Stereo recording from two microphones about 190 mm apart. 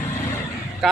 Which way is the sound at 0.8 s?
Centre (ahead or behind).